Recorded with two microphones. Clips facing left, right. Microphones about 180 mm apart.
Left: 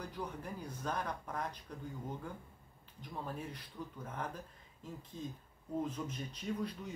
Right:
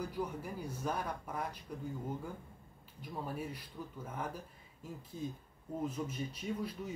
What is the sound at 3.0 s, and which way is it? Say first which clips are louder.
Speech: right 2 dB; 10° right (ahead or behind).